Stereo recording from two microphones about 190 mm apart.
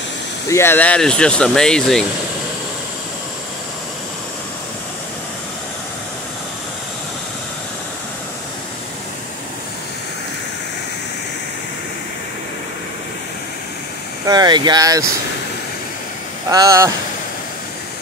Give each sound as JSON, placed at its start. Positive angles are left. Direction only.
{"t": 0.5, "sound": "speech", "side_deg": 10}
{"t": 14.2, "sound": "speech", "side_deg": -20}
{"t": 16.4, "sound": "speech", "side_deg": -15}